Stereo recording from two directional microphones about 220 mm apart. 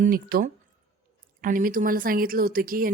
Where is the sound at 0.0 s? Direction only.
40° right (ahead or behind).